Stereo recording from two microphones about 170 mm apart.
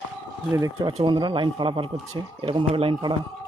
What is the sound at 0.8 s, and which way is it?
Speech, 30° right (ahead or behind).